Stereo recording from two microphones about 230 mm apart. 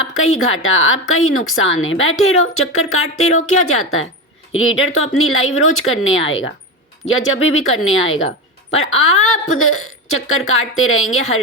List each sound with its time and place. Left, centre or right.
0.0 s a woman's voice: left